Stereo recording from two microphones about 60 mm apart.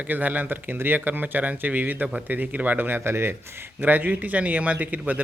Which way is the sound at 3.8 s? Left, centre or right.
Right.